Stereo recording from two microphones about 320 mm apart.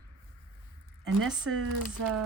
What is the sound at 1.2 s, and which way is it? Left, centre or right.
Speech, centre.